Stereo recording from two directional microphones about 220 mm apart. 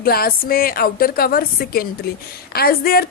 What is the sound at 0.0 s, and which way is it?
A woman's voice, 45° left (ahead or behind).